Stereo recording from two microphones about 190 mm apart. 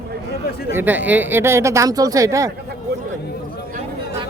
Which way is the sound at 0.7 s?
10° right (ahead or behind).